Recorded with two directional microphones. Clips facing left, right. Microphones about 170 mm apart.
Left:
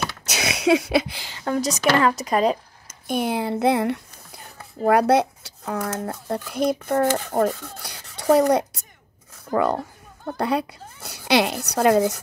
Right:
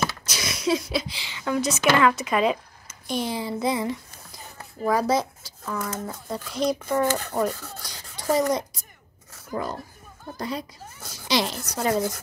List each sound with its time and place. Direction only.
0.2 s a woman's voice: 70° left (ahead or behind)